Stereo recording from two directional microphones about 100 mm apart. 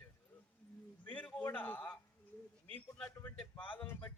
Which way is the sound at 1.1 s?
10° left (ahead or behind).